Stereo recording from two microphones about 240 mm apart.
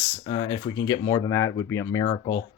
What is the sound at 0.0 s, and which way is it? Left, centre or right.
Speech, centre.